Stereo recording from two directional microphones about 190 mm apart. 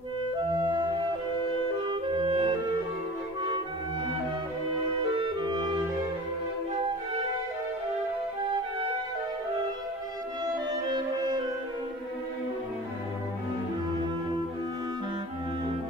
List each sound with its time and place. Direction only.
0.6 s flute: 25° right (ahead or behind)
1.9 s clarinet: 25° right (ahead or behind)
5.1 s clarinet: 25° right (ahead or behind)